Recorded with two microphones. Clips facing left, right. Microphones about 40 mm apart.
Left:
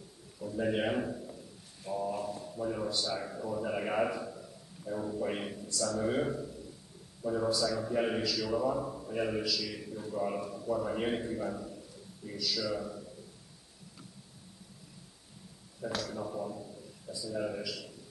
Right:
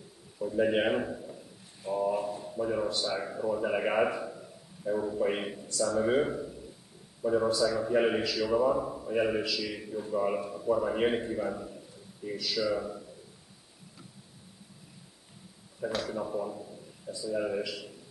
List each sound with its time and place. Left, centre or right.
0.4 s a man's voice: right
16.0 s a man's voice: right